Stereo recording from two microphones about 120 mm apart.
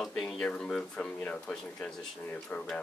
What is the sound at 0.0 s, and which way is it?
Speech, centre (ahead or behind).